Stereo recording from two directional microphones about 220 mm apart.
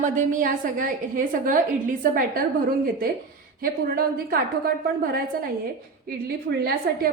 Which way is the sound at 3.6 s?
40° right (ahead or behind).